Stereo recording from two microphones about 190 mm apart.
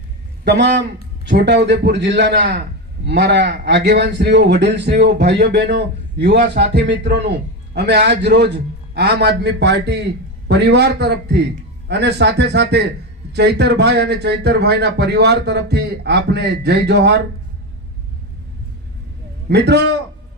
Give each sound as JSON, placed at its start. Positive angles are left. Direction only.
{"t": 0.4, "sound": "a man's voice", "side_deg": -65}
{"t": 19.5, "sound": "a man's voice", "side_deg": -60}